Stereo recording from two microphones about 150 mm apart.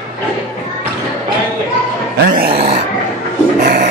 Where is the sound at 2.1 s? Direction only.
90° right.